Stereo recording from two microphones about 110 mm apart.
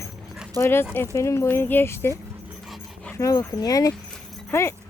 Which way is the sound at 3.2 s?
30° left (ahead or behind).